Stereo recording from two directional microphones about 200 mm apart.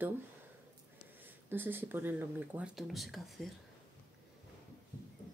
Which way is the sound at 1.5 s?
10° right (ahead or behind).